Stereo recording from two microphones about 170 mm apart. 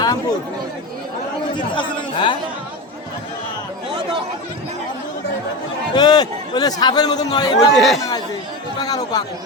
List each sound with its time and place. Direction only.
0.0 s speech: 25° left (ahead or behind)
1.5 s speech: 25° left (ahead or behind)
6.0 s a man's voice: 25° left (ahead or behind)
7.8 s speech: centre (ahead or behind)
8.8 s a man's voice: 20° left (ahead or behind)